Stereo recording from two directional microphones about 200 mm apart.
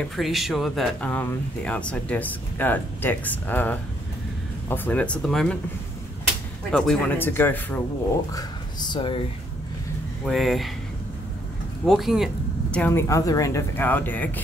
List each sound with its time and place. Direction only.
0.0 s speech: centre (ahead or behind)
6.7 s speech: 5° left (ahead or behind); by 9.2 s 25° left (ahead or behind)
10.2 s speech: centre (ahead or behind)
11.8 s speech: centre (ahead or behind)
12.7 s speech: 10° left (ahead or behind)